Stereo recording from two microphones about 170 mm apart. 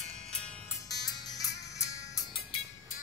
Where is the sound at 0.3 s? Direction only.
5° left (ahead or behind).